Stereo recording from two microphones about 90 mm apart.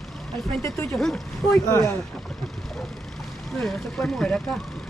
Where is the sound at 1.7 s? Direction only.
30° left (ahead or behind).